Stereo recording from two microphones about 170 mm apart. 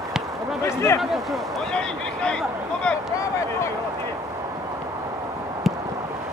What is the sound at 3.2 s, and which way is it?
Speech, 20° left (ahead or behind).